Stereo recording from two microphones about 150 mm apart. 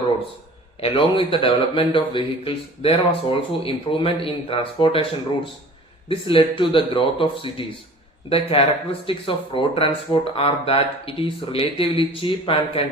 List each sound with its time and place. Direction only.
0.8 s speech: 35° left (ahead or behind)
6.1 s speech: 35° left (ahead or behind)